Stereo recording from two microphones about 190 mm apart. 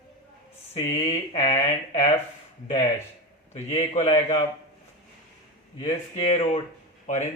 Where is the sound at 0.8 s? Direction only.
15° left (ahead or behind).